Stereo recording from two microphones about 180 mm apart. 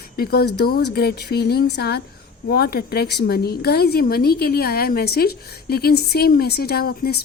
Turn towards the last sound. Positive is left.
turn(degrees=60)  # may be behind; listen again after turning